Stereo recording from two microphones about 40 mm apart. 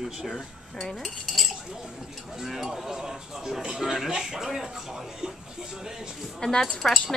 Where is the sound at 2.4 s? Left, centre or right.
Centre.